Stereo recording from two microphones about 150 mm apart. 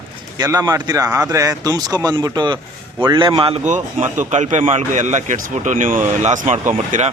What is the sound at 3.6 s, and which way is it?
Speech, 50° right (ahead or behind).